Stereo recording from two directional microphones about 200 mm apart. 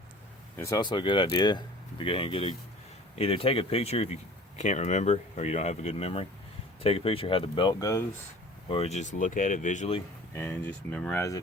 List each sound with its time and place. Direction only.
0.5 s speech: 15° left (ahead or behind)
8.7 s speech: 30° left (ahead or behind)
10.3 s speech: 10° left (ahead or behind)